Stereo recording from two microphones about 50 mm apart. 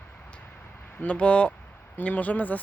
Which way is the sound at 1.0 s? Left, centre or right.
Left.